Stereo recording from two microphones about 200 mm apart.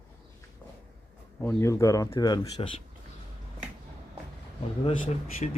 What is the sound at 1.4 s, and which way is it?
Speech, 15° left (ahead or behind).